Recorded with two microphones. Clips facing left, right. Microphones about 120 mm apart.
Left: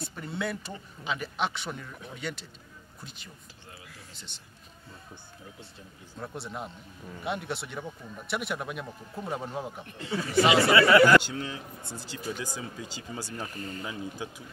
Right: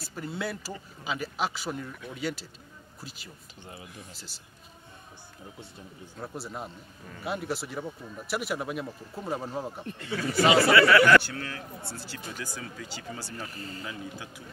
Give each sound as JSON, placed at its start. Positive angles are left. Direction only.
{"t": 0.0, "sound": "a man's voice", "side_deg": 0}
{"t": 3.7, "sound": "speech", "side_deg": -20}
{"t": 4.1, "sound": "speech", "side_deg": -5}
{"t": 6.1, "sound": "speech", "side_deg": -5}
{"t": 9.9, "sound": "speech", "side_deg": 25}
{"t": 13.6, "sound": "speech", "side_deg": -30}
{"t": 13.8, "sound": "speech", "side_deg": 20}